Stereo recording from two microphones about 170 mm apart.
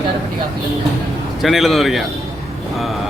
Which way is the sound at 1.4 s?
Centre (ahead or behind).